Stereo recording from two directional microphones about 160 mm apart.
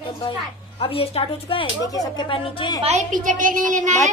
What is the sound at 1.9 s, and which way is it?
Speech, 25° left (ahead or behind).